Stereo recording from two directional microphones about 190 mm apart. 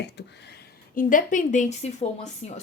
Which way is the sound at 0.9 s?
45° left (ahead or behind).